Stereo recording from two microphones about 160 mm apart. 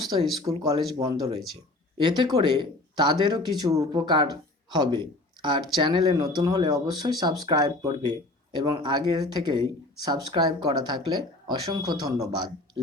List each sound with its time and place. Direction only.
0.4 s speech: 25° right (ahead or behind)